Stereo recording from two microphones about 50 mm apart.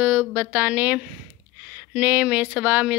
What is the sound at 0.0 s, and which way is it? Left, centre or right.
Speech, right.